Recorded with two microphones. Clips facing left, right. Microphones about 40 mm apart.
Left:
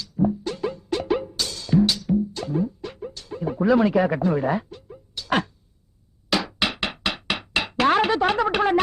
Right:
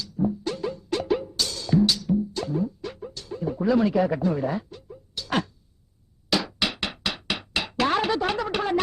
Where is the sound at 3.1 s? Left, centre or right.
Left.